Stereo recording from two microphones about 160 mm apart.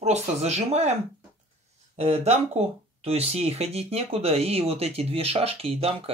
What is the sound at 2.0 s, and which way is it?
Speech, 40° right (ahead or behind).